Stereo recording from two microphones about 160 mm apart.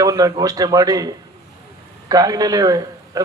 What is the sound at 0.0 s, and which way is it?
A man's voice, 25° right (ahead or behind).